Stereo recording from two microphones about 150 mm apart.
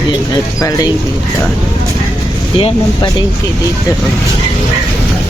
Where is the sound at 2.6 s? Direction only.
35° left (ahead or behind).